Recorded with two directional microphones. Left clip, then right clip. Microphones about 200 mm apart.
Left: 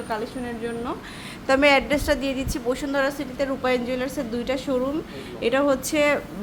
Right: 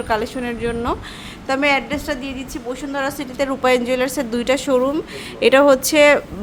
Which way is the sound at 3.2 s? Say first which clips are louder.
Right 6 dB; 20° right (ahead or behind).